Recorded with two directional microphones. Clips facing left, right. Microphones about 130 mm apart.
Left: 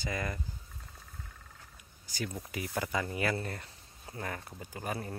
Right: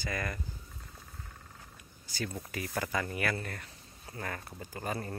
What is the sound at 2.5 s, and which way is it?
Speech, 15° left (ahead or behind).